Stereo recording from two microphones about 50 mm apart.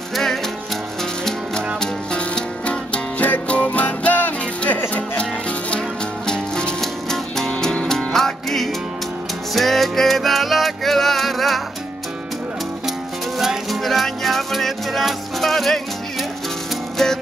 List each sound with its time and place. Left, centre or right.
0.1 s music: centre
1.8 s music: centre; by 4.3 s left
5.2 s music: left; by 11.6 s centre
13.4 s music: centre